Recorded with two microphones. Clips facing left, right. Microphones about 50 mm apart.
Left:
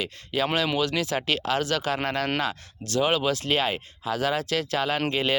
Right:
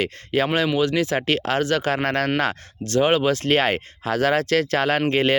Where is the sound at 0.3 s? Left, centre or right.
Right.